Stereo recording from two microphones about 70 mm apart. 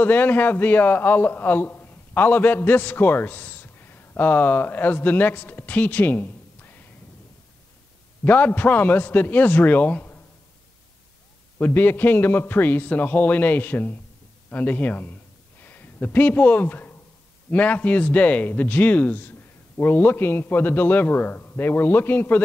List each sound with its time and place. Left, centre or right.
0.0 s a man's voice: left
8.2 s a man's voice: left
11.5 s a man's voice: left